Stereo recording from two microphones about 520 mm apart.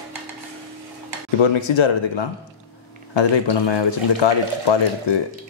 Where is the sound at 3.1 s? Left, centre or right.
Left.